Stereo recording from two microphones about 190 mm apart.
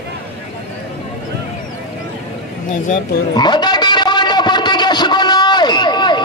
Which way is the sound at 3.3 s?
20° left (ahead or behind).